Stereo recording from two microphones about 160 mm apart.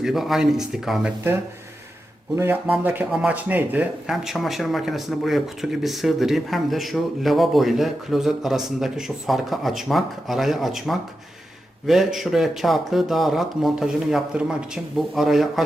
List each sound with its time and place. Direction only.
0.0 s speech: centre (ahead or behind)
2.3 s speech: 15° right (ahead or behind)